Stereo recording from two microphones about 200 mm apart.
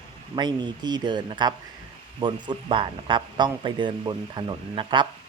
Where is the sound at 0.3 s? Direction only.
20° right (ahead or behind).